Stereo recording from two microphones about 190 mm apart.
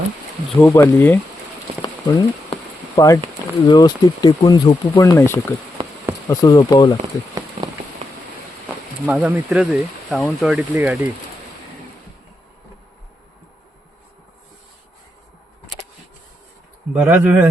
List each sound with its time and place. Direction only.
0.6 s speech: 10° left (ahead or behind)
1.8 s a sound: 20° left (ahead or behind)
3.7 s speech: 20° left (ahead or behind)
5.8 s insect: 25° right (ahead or behind)
6.2 s speech: 20° left (ahead or behind)
9.0 s speech: 5° right (ahead or behind)
16.9 s speech: 5° right (ahead or behind)